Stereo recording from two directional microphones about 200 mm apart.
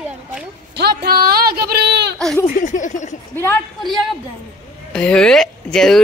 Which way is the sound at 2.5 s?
40° left (ahead or behind).